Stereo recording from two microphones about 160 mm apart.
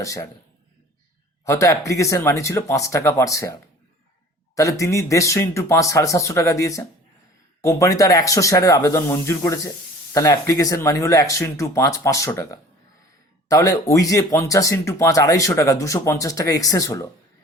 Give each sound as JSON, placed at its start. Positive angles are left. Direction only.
{"t": 0.0, "sound": "speech", "side_deg": 20}
{"t": 1.5, "sound": "speech", "side_deg": 20}
{"t": 4.5, "sound": "speech", "side_deg": 20}